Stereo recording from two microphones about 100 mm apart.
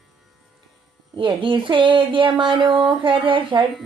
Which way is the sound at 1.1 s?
55° right (ahead or behind).